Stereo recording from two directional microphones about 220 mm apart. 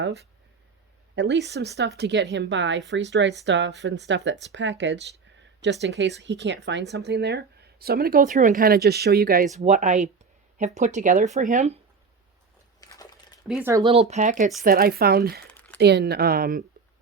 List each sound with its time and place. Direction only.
0.0 s speech: 50° right (ahead or behind); by 11.8 s 30° right (ahead or behind)
12.8 s a sound: 15° left (ahead or behind)
13.5 s speech: 10° right (ahead or behind)
13.8 s speech: 25° right (ahead or behind); by 15.4 s 45° right (ahead or behind)
15.5 s a sound: 5° left (ahead or behind)
15.8 s speech: 50° right (ahead or behind)